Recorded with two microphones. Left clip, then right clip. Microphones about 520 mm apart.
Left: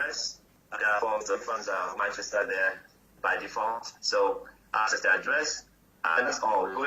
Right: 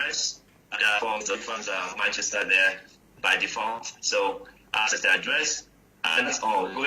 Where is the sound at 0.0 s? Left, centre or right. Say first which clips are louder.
Right 4 dB; right.